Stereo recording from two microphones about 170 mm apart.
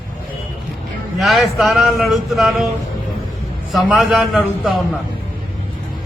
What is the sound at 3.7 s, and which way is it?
Speech, centre (ahead or behind).